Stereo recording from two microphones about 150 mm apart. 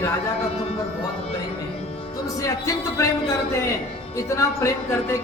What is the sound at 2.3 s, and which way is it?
Speech, 20° left (ahead or behind).